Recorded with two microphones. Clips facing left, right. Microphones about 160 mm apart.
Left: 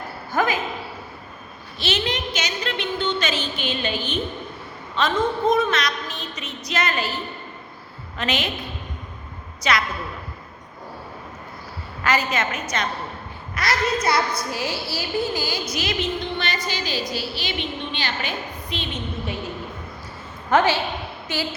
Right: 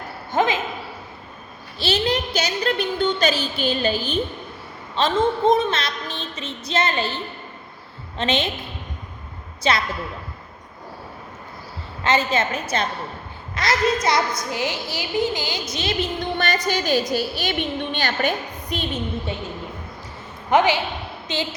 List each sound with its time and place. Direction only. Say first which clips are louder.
0.3 s a sound: right 2 dB; 20° right (ahead or behind)
1.8 s a woman's voice: right 4 dB; 35° right (ahead or behind)
8.2 s a woman's voice: right 3 dB; 25° right (ahead or behind)
9.7 s a woman's voice: right 1 dB; 30° right (ahead or behind)
12.0 s a woman's voice: right 2 dB; 25° right (ahead or behind)
16.4 s a woman's voice: right 5 dB; 45° right (ahead or behind)
20.5 s a woman's voice: right 1 dB; 15° right (ahead or behind)